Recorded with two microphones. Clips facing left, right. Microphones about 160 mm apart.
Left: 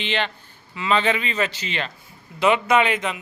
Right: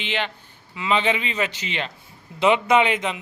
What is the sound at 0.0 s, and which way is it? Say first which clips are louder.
A man's voice: left 2 dB; 10° right (ahead or behind).